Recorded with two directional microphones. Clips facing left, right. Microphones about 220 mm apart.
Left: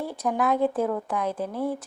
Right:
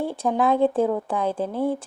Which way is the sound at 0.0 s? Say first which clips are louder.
Right 4 dB; 30° right (ahead or behind).